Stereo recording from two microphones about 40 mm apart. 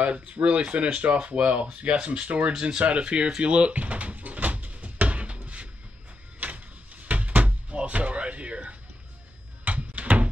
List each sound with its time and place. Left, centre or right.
0.0 s speech: right
2.5 s speech: centre
3.3 s door: right
9.7 s a sound: right